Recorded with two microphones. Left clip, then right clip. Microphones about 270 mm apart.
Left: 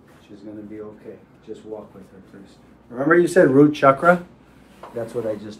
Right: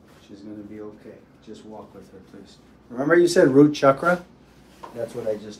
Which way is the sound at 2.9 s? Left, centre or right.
Centre.